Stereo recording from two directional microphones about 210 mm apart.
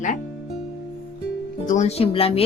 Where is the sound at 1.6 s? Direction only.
35° left (ahead or behind).